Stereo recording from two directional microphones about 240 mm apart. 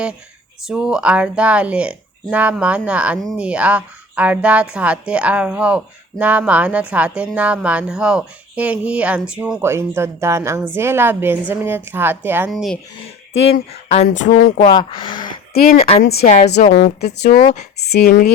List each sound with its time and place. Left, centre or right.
0.6 s a woman's voice: centre
13.8 s a sound: left
14.3 s a woman's voice: left
14.7 s speech: centre
16.0 s a woman's voice: left
17.0 s a woman's voice: left